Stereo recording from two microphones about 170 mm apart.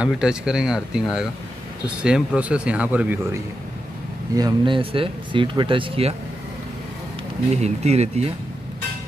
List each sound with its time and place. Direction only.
0.0 s speech: 5° right (ahead or behind)
2.0 s speech: 5° right (ahead or behind)
4.4 s speech: 25° right (ahead or behind)
7.6 s speech: 40° right (ahead or behind)